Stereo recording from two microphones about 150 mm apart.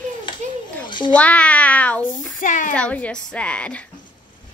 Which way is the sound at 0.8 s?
30° left (ahead or behind).